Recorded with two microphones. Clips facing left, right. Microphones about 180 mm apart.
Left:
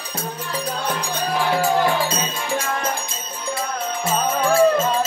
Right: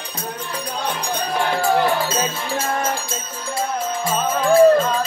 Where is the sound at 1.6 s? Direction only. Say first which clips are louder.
Right 2 dB; 15° left (ahead or behind).